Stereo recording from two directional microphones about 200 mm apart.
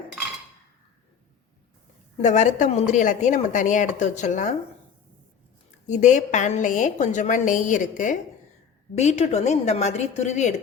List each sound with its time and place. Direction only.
2.1 s a woman's voice: 35° left (ahead or behind)
5.9 s a woman's voice: 35° left (ahead or behind)